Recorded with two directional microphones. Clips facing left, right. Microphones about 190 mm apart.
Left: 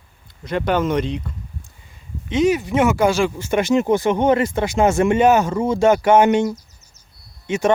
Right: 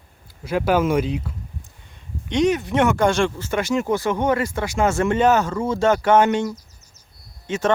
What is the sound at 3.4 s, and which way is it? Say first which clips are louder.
Speech: left 4 dB; 20° left (ahead or behind).